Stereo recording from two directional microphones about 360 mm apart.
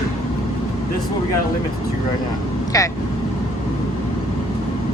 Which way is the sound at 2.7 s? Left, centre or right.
Centre.